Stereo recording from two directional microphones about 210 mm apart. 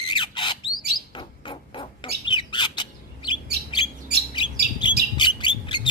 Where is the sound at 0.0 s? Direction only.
20° left (ahead or behind).